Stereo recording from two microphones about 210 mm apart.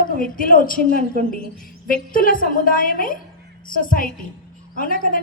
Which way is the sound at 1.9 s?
40° left (ahead or behind).